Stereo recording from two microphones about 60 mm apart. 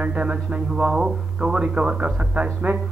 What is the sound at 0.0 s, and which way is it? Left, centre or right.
A man's voice, right.